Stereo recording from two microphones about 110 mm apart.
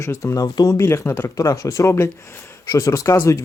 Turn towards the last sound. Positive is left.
turn(degrees=30)  # may be behind; listen again after turning